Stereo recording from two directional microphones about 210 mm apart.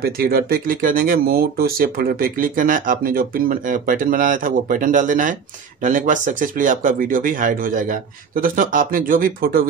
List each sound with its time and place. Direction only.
0.0 s speech: 45° right (ahead or behind)